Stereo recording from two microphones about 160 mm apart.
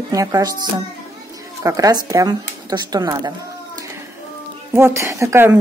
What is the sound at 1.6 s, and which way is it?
A woman's voice, 20° right (ahead or behind).